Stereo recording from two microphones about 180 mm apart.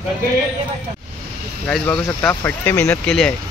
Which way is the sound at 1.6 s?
5° left (ahead or behind).